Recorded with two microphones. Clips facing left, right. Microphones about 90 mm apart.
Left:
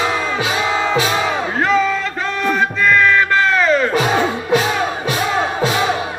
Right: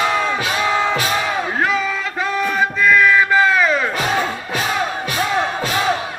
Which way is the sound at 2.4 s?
5° right (ahead or behind).